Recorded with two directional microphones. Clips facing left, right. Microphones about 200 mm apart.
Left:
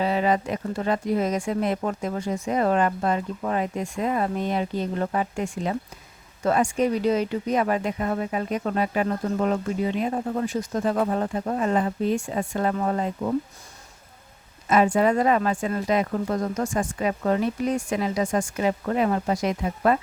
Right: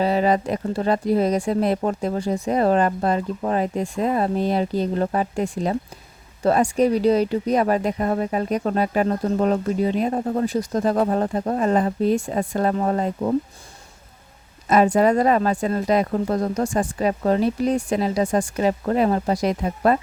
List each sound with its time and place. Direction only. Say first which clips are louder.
0.0 s speech: right 3 dB; 35° right (ahead or behind)
14.7 s speech: right 3 dB; 40° right (ahead or behind)